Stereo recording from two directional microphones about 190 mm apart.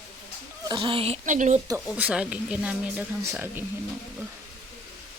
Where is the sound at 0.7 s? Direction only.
25° right (ahead or behind).